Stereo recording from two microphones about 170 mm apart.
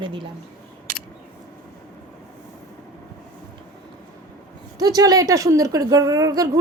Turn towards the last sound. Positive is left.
turn(degrees=-20)  # may be behind; listen again after turning